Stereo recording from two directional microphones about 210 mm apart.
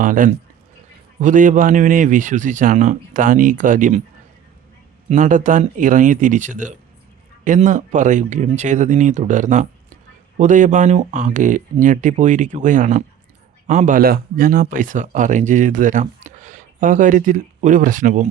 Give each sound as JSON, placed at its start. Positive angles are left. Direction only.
{"t": 0.0, "sound": "speech", "side_deg": -40}
{"t": 5.0, "sound": "speech", "side_deg": -35}